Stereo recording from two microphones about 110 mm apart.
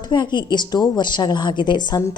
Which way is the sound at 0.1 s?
45° left (ahead or behind).